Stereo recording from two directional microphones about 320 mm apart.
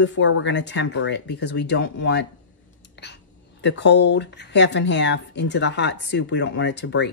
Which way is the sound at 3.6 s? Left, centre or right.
Left.